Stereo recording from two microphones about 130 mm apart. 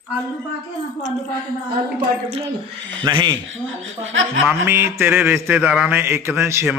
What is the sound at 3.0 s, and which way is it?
Speech, 35° right (ahead or behind).